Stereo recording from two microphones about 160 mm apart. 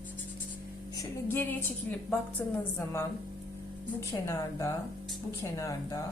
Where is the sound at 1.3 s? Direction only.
10° left (ahead or behind).